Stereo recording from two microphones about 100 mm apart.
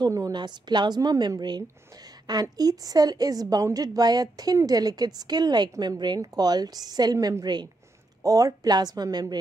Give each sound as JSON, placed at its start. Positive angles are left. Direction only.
{"t": 0.1, "sound": "a woman's voice", "side_deg": -40}